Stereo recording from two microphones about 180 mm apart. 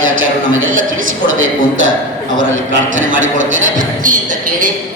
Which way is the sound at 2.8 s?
45° right (ahead or behind).